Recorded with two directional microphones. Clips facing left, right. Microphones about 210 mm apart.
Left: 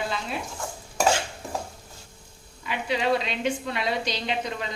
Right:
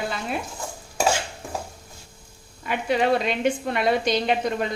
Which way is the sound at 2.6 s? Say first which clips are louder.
Right 4 dB; 50° right (ahead or behind).